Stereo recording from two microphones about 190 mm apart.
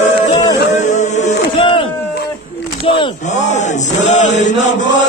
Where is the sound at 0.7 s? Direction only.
40° left (ahead or behind).